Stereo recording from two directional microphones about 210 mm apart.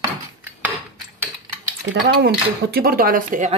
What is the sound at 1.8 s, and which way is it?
Speech, 55° right (ahead or behind).